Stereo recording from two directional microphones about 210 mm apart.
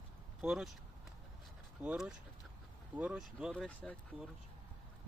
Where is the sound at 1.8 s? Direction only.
5° right (ahead or behind).